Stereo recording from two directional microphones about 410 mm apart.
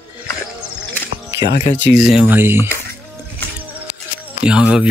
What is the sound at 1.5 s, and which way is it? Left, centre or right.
Speech, left.